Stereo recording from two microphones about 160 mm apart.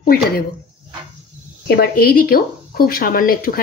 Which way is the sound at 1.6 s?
70° left (ahead or behind).